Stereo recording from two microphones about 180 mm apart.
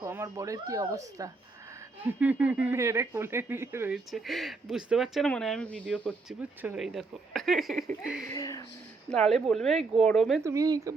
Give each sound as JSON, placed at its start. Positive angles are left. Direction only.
{"t": 0.0, "sound": "speech", "side_deg": -15}
{"t": 2.2, "sound": "speech", "side_deg": -5}
{"t": 3.9, "sound": "speech", "side_deg": 0}
{"t": 6.6, "sound": "speech", "side_deg": -5}
{"t": 8.3, "sound": "speech", "side_deg": 20}
{"t": 9.0, "sound": "speech", "side_deg": 5}
{"t": 10.4, "sound": "speech", "side_deg": -20}